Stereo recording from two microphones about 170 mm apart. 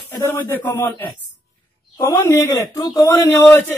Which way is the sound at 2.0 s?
15° left (ahead or behind).